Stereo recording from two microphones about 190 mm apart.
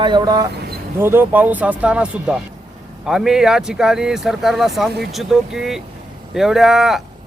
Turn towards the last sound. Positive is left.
turn(degrees=0)  # may be behind; listen again after turning